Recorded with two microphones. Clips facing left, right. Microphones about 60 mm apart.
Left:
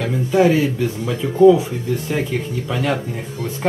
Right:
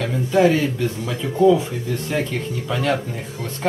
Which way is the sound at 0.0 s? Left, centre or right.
Centre.